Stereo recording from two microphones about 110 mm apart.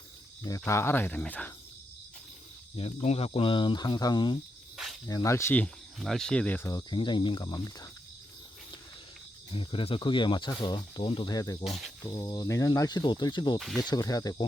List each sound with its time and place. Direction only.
0.6 s speech: 20° left (ahead or behind)
2.7 s speech: 70° left (ahead or behind); by 4.4 s 40° left (ahead or behind)
5.0 s speech: 30° left (ahead or behind)
6.0 s speech: 5° left (ahead or behind)
6.9 s speech: 45° left (ahead or behind)
9.5 s speech: 55° left (ahead or behind)
11.3 s speech: 35° left (ahead or behind)
11.6 s speech: centre (ahead or behind)
12.2 s speech: 35° left (ahead or behind)
13.6 s speech: centre (ahead or behind)
13.8 s speech: 35° left (ahead or behind)